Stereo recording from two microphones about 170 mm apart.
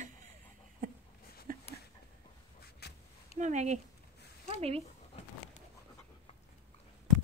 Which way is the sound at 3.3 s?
45° right (ahead or behind).